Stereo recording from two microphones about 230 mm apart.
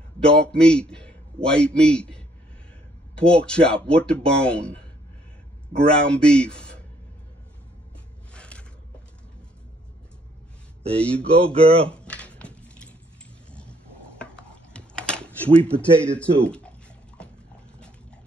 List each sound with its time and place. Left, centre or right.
0.2 s a man's voice: centre
5.9 s speech: centre
8.3 s a sound: centre
11.0 s speech: centre
11.5 s speech: right
11.9 s a sound: centre
16.0 s speech: centre